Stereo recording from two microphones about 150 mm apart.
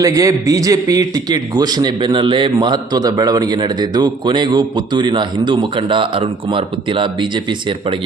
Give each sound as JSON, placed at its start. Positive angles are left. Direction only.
{"t": 0.0, "sound": "a man's voice", "side_deg": -20}